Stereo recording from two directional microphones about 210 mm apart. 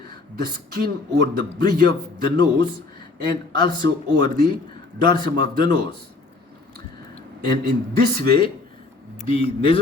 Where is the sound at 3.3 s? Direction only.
20° left (ahead or behind).